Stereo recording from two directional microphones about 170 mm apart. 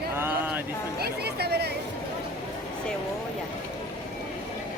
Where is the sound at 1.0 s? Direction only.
70° right (ahead or behind).